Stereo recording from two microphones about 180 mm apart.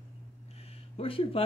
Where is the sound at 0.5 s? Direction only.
35° left (ahead or behind).